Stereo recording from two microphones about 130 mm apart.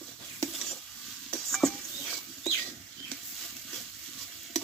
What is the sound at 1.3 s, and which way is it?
Stir, 5° left (ahead or behind).